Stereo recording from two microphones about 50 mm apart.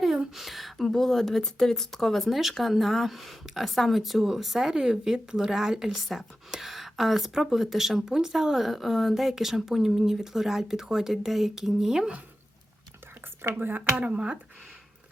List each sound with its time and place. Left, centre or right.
0.3 s speech: centre
13.6 s speech: right
14.0 s speech: right